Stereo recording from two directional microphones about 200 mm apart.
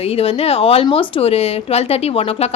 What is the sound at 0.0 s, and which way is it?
A woman's voice, 30° left (ahead or behind).